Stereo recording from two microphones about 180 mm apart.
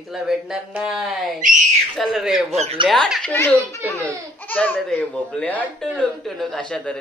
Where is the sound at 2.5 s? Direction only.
35° right (ahead or behind).